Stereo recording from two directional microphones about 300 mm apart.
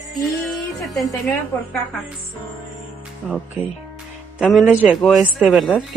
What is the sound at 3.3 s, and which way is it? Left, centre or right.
A woman's voice, centre.